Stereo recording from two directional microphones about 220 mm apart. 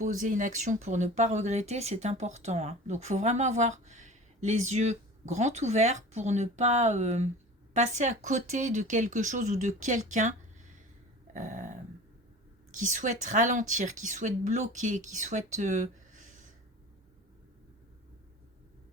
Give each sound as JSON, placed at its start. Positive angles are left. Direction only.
{"t": 0.0, "sound": "speech", "side_deg": -35}
{"t": 11.3, "sound": "speech", "side_deg": -35}